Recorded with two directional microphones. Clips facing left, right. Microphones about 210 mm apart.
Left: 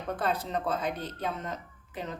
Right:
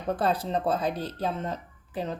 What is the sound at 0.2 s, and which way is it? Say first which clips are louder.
Speech: right 2 dB; 35° right (ahead or behind).